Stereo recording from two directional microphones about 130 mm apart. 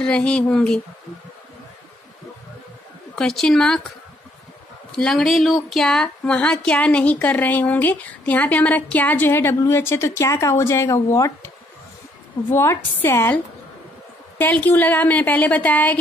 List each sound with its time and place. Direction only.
0.0 s speech: 10° left (ahead or behind)
3.2 s a woman's voice: 5° left (ahead or behind)
4.9 s speech: 5° left (ahead or behind)
14.4 s speech: 15° left (ahead or behind)